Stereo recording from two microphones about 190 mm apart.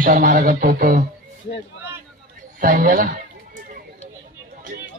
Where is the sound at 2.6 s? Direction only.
45° right (ahead or behind).